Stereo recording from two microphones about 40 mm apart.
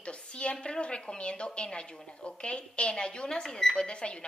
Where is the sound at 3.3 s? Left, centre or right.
Centre.